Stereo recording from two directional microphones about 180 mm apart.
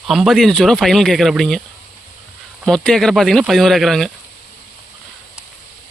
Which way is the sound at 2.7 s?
5° left (ahead or behind).